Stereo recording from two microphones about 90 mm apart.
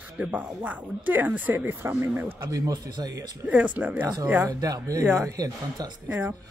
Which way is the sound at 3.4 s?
15° right (ahead or behind).